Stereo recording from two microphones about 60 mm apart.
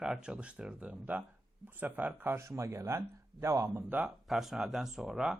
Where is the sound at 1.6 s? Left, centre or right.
Right.